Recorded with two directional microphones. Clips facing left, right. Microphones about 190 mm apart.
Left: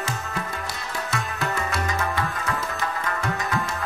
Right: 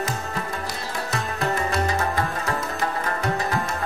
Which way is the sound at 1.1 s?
35° right (ahead or behind).